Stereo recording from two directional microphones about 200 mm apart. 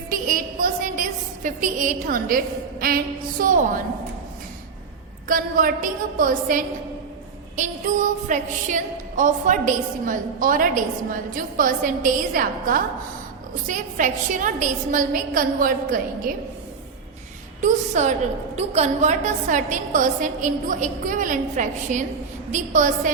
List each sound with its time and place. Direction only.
0.1 s a sound: 45° right (ahead or behind)
2.8 s a woman's voice: 45° right (ahead or behind)
5.3 s a woman's voice: 45° right (ahead or behind)
8.3 s a woman's voice: 40° right (ahead or behind)
17.6 s a woman's voice: 35° right (ahead or behind)